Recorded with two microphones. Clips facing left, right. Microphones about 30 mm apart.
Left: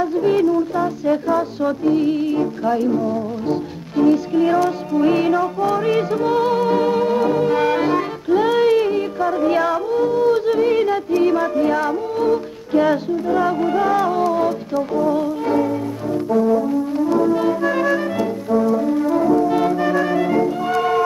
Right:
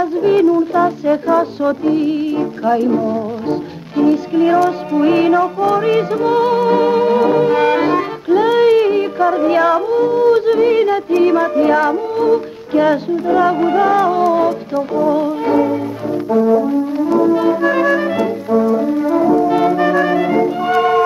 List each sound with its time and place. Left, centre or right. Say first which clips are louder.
0.0 s music: right 4 dB; centre
16.3 s brass instrument: right 4 dB; centre